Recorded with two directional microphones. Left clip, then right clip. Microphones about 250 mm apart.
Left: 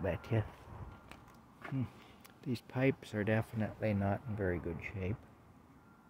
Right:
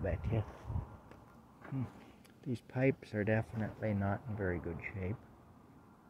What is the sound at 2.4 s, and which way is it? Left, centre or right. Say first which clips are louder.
Speech: even; centre.